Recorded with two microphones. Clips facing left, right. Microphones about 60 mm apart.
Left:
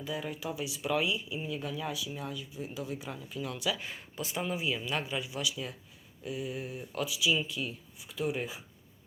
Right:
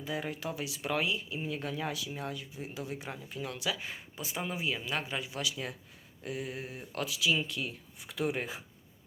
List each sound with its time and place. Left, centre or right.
0.0 s speech: right
6.2 s speech: right
6.5 s speech: right
7.4 s speech: right
8.3 s speech: right